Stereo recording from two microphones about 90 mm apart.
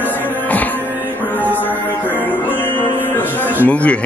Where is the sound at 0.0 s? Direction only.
20° left (ahead or behind).